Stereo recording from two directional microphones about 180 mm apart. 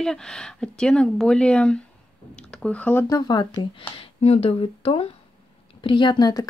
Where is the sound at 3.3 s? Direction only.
25° left (ahead or behind).